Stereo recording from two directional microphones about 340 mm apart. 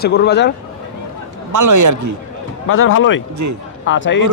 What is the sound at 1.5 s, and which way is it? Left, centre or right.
Speech, right.